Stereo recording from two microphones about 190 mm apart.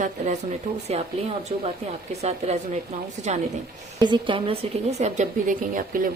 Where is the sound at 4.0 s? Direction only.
25° right (ahead or behind); by 6.1 s 45° right (ahead or behind).